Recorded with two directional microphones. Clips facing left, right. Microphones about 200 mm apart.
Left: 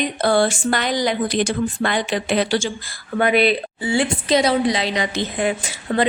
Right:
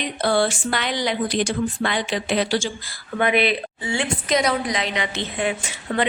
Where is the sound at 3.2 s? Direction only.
35° left (ahead or behind).